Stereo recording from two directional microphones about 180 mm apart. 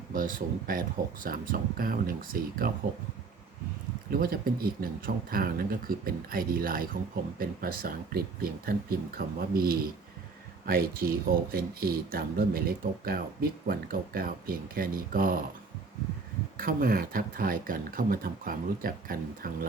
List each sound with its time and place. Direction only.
0.1 s speech: 50° right (ahead or behind)
4.1 s speech: 55° right (ahead or behind)
16.6 s speech: 55° right (ahead or behind)